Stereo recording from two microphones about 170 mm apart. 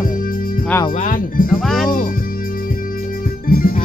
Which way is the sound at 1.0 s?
55° left (ahead or behind).